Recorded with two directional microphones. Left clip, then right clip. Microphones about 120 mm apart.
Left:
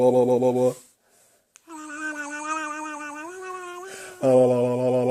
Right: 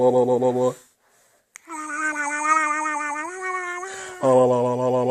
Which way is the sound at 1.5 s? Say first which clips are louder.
Right 7 dB; 40° right (ahead or behind).